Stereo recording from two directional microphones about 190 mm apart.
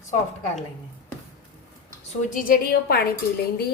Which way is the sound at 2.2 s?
45° left (ahead or behind).